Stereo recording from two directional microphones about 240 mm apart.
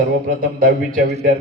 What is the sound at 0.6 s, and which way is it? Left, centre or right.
Speech, right.